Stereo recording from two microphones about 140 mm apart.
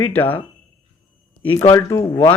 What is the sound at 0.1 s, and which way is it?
Speech, 15° left (ahead or behind).